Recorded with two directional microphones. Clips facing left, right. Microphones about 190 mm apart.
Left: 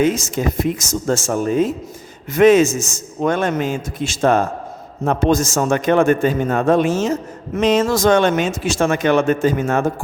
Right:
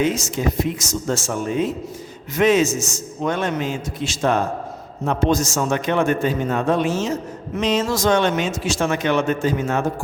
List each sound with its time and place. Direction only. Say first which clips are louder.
0.0 s speech: left 3 dB; 50° left (ahead or behind)